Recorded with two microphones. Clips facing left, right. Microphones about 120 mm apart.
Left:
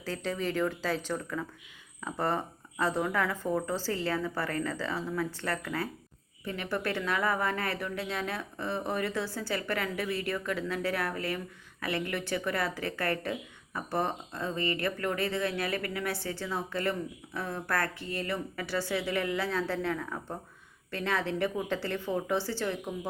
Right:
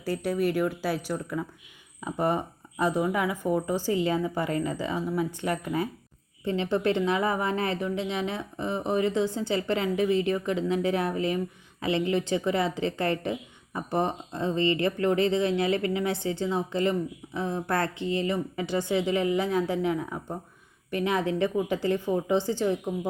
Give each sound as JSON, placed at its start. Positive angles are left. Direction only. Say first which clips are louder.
{"t": 0.0, "sound": "a woman's voice", "louder": "right 6 dB", "side_deg": -10}